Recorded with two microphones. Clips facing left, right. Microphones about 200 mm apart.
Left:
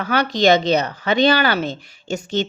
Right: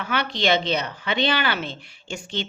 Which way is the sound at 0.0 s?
40° left (ahead or behind).